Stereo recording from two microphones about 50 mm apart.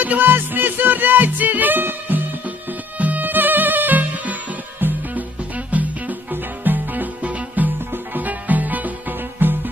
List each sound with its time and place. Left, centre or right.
0.0 s music: right